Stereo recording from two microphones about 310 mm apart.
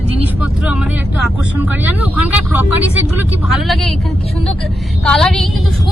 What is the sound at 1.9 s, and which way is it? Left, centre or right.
Speech, left.